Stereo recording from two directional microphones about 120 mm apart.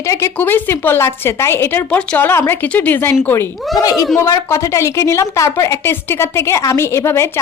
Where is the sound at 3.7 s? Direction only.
30° left (ahead or behind).